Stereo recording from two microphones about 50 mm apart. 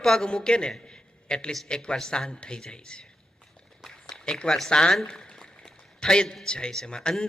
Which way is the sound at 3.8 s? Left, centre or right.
Centre.